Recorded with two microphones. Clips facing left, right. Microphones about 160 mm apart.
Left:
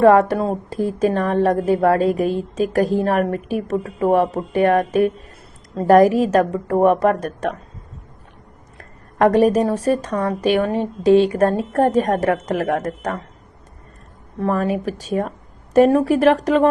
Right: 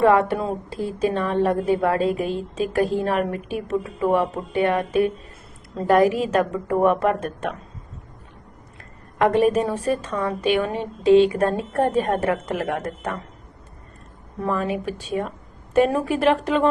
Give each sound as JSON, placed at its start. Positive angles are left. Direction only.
{"t": 0.0, "sound": "a woman's voice", "side_deg": 40}
{"t": 8.8, "sound": "a woman's voice", "side_deg": 40}
{"t": 14.4, "sound": "a woman's voice", "side_deg": 40}